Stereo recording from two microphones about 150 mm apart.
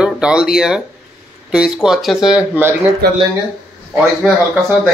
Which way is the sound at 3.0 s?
90° right.